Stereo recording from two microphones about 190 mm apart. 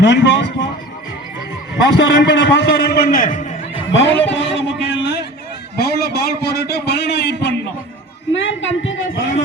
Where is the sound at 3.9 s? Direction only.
75° left (ahead or behind).